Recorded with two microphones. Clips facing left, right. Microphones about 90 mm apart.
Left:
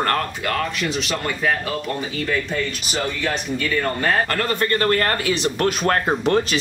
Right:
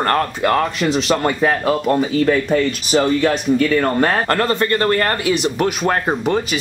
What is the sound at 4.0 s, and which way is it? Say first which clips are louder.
Speech: right 4 dB; 35° right (ahead or behind).